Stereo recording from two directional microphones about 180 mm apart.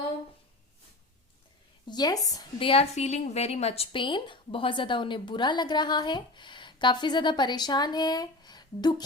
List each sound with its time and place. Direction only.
1.9 s a woman's voice: 20° left (ahead or behind)